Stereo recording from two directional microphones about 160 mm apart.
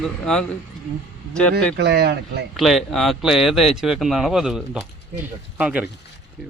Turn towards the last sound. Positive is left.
turn(degrees=-10)  # may be behind; listen again after turning